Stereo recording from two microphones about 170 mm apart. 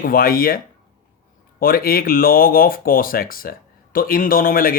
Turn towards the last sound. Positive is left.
turn(degrees=60)  # may be behind; listen again after turning